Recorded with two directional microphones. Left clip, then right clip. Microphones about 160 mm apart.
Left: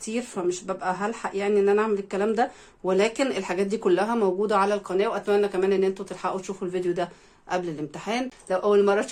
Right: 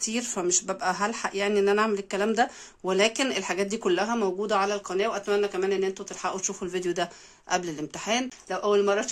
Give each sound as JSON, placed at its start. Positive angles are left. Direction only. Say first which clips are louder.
{"t": 0.3, "sound": "speech", "louder": "right 1 dB", "side_deg": -25}
{"t": 6.6, "sound": "speech", "louder": "left 3 dB", "side_deg": -20}